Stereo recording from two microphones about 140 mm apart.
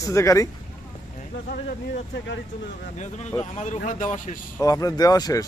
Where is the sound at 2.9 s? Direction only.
55° left (ahead or behind).